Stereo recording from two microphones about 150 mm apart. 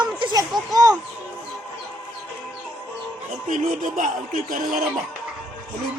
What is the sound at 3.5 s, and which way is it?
Speech, 60° right (ahead or behind).